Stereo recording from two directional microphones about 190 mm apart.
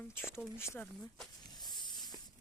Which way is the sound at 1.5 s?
20° left (ahead or behind).